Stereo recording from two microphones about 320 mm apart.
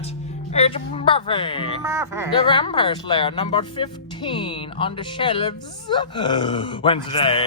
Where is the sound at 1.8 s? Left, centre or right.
Centre.